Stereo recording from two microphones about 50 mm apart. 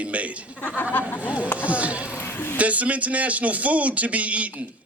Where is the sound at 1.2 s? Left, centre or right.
Right.